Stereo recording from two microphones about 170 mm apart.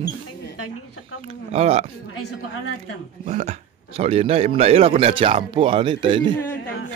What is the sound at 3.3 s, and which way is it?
A man's voice, 40° right (ahead or behind).